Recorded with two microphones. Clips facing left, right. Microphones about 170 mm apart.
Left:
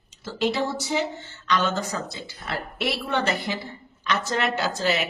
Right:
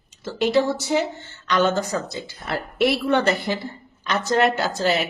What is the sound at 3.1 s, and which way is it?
A woman's voice, 45° right (ahead or behind).